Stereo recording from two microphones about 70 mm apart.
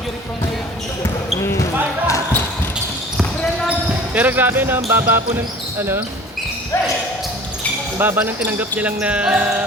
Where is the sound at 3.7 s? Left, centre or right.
Right.